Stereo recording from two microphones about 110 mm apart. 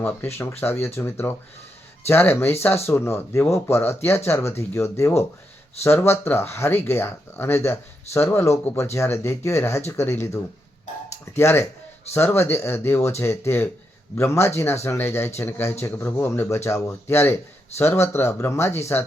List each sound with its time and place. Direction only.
0.0 s speech: 20° left (ahead or behind)